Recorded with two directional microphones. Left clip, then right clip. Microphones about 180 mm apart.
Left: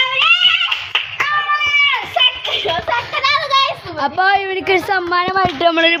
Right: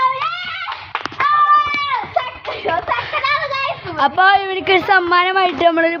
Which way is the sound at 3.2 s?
35° left (ahead or behind).